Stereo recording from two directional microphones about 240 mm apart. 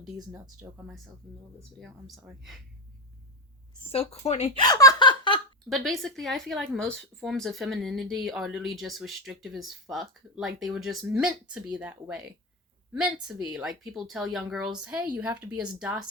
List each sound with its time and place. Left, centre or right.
0.3 s speech: centre
0.9 s speech: centre
4.3 s a sound: left
5.6 s speech: centre